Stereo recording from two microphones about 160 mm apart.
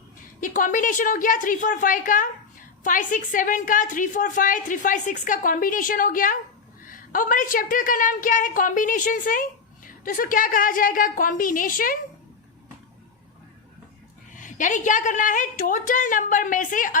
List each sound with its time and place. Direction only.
0.3 s a woman's voice: 55° left (ahead or behind)
14.3 s a woman's voice: 50° left (ahead or behind)